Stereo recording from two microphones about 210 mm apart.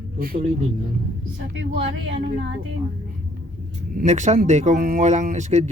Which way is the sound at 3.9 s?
35° right (ahead or behind).